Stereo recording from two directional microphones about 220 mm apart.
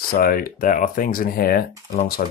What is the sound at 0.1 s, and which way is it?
Speech, 40° left (ahead or behind).